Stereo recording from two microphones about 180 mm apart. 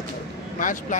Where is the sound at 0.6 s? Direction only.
45° left (ahead or behind).